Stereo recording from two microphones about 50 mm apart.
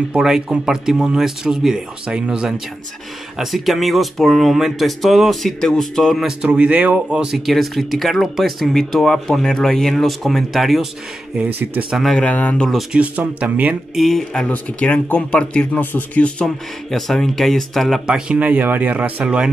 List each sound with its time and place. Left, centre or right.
0.2 s speech: centre
3.3 s speech: centre
6.2 s speech: centre
7.3 s speech: centre
12.2 s speech: left
12.9 s speech: right
13.9 s speech: centre
14.5 s speech: left
15.8 s speech: left
16.2 s speech: left
16.4 s speech: centre
18.0 s speech: centre
18.4 s speech: right